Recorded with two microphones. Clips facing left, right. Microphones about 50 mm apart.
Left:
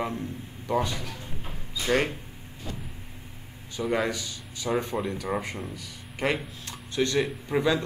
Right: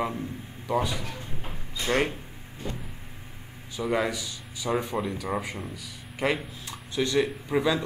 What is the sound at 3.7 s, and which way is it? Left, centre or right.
Speech, centre.